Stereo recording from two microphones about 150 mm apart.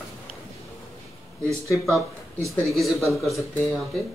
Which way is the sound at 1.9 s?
20° right (ahead or behind).